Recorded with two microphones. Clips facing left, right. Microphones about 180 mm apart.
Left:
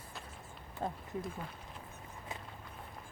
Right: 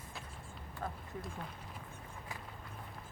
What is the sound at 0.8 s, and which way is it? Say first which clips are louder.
Speech: left 4 dB; 25° left (ahead or behind).